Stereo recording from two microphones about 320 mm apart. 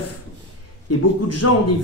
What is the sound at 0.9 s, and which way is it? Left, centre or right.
Speech, left.